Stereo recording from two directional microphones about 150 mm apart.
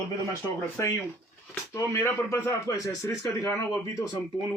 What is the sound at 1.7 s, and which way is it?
A man's voice, 20° left (ahead or behind).